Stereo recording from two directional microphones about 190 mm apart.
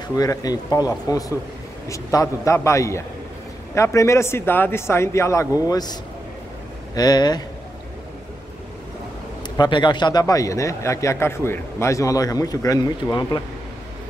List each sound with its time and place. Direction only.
0.1 s a man's voice: 20° left (ahead or behind)
7.0 s speech: 20° left (ahead or behind)
9.6 s a man's voice: 25° left (ahead or behind)